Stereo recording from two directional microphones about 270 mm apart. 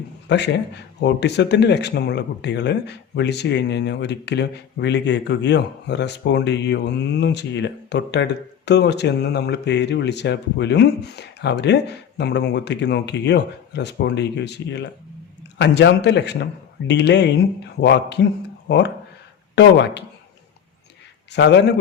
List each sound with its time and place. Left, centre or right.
0.3 s speech: left
19.5 s speech: left
21.3 s speech: left